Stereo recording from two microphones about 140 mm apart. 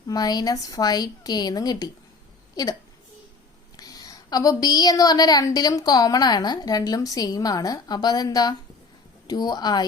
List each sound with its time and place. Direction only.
0.1 s speech: 30° left (ahead or behind)
3.8 s speech: 25° left (ahead or behind)